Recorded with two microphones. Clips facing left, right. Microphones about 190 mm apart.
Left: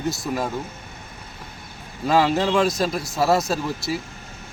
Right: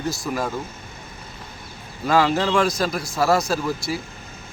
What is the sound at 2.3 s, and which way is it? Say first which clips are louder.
Speech: even; 20° left (ahead or behind).